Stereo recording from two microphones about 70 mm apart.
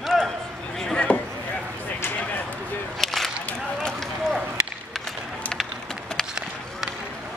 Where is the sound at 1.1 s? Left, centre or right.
Centre.